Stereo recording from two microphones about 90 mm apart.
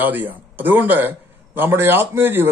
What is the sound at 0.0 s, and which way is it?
A man's voice, 20° right (ahead or behind).